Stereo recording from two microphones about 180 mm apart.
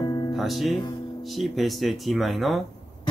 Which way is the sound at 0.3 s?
Centre (ahead or behind).